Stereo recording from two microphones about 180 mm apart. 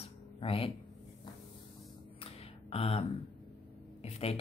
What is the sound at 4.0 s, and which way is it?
Speech, 35° left (ahead or behind).